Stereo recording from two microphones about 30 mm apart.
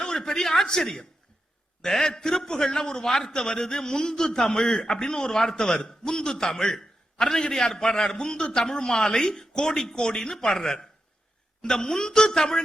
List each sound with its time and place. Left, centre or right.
0.0 s a man's voice: left